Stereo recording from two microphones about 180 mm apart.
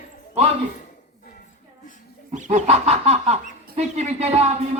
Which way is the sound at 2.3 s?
40° right (ahead or behind).